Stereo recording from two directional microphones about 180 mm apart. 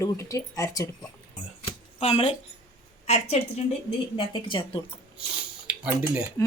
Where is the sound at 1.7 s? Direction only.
35° left (ahead or behind).